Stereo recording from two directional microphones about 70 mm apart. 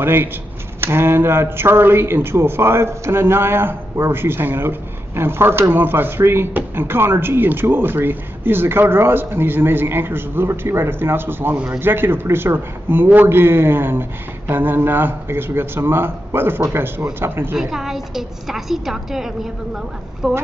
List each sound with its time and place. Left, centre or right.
0.0 s speech: right
11.5 s a man's voice: centre
11.8 s speech: right
17.6 s a woman's voice: centre